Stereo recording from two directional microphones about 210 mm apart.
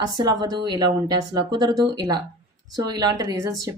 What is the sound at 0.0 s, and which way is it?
Speech, 20° right (ahead or behind).